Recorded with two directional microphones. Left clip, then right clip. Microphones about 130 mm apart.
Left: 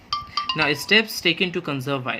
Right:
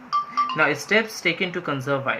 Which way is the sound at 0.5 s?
90° left.